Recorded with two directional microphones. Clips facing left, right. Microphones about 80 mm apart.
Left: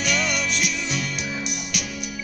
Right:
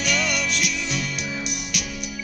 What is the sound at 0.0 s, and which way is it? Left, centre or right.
Music, left.